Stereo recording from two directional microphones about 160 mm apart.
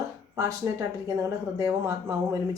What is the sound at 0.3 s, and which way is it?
Speech, 20° right (ahead or behind).